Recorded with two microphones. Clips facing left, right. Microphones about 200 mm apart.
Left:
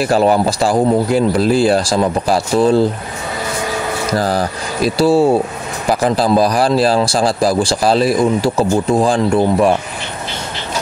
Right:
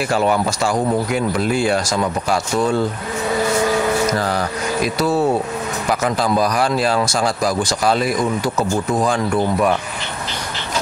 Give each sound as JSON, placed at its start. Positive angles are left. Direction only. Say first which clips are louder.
{"t": 0.0, "sound": "speech", "louder": "left 5 dB", "side_deg": 35}
{"t": 4.2, "sound": "speech", "louder": "left 3 dB", "side_deg": 35}